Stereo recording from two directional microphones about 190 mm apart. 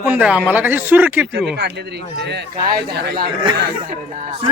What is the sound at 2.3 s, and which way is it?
Speech, 55° right (ahead or behind).